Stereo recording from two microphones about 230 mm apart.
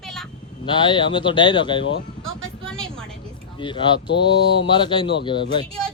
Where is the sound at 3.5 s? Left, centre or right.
Left.